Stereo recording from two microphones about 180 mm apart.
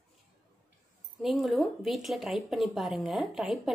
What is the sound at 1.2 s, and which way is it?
Speech, centre (ahead or behind).